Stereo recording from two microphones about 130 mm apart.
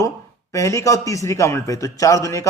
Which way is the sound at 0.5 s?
25° left (ahead or behind).